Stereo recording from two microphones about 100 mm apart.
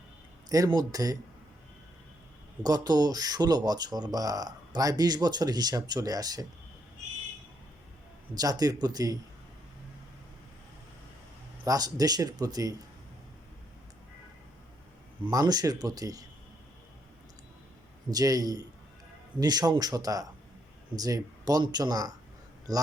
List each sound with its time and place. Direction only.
0.4 s speech: 40° right (ahead or behind)
2.6 s speech: 40° right (ahead or behind)
8.4 s speech: 40° right (ahead or behind)
11.6 s speech: 40° right (ahead or behind)
15.3 s speech: 40° right (ahead or behind)
18.1 s speech: 35° right (ahead or behind)